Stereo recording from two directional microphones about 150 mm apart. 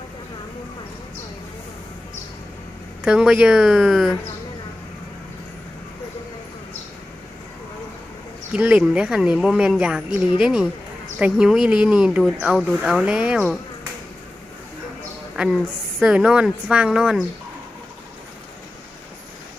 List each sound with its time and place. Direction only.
3.0 s a woman's voice: 5° right (ahead or behind)
8.5 s a woman's voice: 10° right (ahead or behind)
15.4 s a woman's voice: 5° right (ahead or behind)